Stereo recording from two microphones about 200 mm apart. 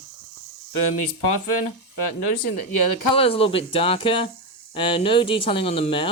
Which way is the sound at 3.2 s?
30° left (ahead or behind).